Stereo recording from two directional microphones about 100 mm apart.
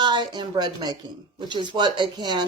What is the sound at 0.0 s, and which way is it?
A woman's voice, 50° right (ahead or behind).